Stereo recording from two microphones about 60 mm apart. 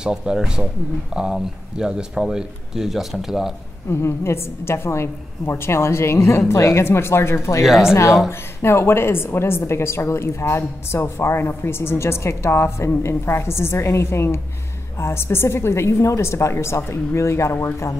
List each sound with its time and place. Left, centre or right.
0.0 s speech: centre
3.9 s a woman's voice: left
7.6 s speech: centre
8.3 s a woman's voice: left